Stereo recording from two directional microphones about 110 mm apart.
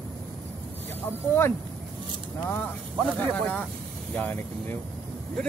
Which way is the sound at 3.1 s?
15° left (ahead or behind).